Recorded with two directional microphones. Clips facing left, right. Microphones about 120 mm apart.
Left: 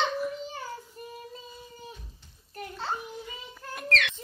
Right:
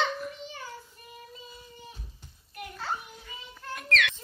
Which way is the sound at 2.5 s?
25° left (ahead or behind).